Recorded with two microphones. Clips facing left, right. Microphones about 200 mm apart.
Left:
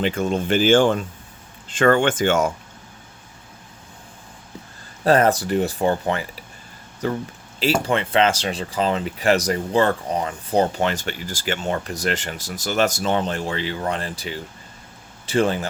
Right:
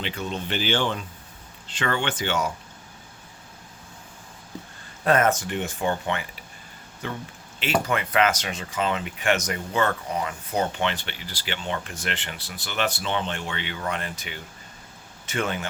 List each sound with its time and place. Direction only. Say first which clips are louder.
0.0 s speech: left 9 dB; 45° left (ahead or behind)
5.0 s speech: left 4 dB; 35° left (ahead or behind)
7.6 s speech: left 4 dB; 30° left (ahead or behind)